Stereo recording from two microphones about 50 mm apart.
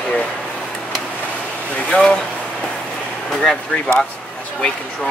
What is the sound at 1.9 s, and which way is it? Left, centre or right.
Speech, left.